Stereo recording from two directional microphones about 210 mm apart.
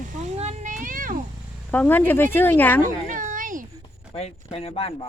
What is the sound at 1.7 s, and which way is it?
Speech, 10° left (ahead or behind).